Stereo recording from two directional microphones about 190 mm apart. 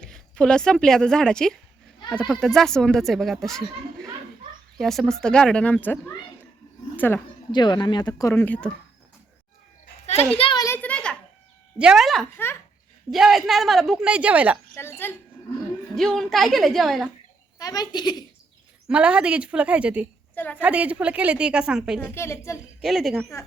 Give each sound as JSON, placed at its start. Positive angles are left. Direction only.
{"t": 0.0, "sound": "a woman's voice", "side_deg": 5}
{"t": 4.8, "sound": "a woman's voice", "side_deg": 0}
{"t": 7.5, "sound": "speech", "side_deg": 25}
{"t": 10.3, "sound": "a child's voice", "side_deg": 25}
{"t": 10.8, "sound": "a sound", "side_deg": 5}
{"t": 11.8, "sound": "a woman's voice", "side_deg": -5}
{"t": 14.8, "sound": "a woman's voice", "side_deg": 10}
{"t": 16.0, "sound": "a woman's voice", "side_deg": 0}
{"t": 17.6, "sound": "speech", "side_deg": 20}
{"t": 18.9, "sound": "a woman's voice", "side_deg": -5}
{"t": 20.3, "sound": "a woman's voice", "side_deg": 10}
{"t": 20.6, "sound": "a woman's voice", "side_deg": -5}
{"t": 22.0, "sound": "a woman's voice", "side_deg": 15}
{"t": 22.8, "sound": "a woman's voice", "side_deg": 0}